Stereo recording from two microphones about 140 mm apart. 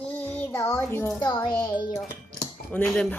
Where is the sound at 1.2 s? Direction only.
30° left (ahead or behind).